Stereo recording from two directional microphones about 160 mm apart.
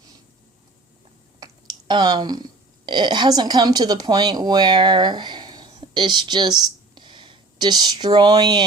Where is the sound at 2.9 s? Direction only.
30° right (ahead or behind).